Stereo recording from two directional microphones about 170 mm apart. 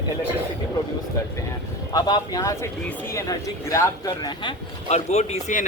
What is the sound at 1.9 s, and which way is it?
Speech, 25° left (ahead or behind).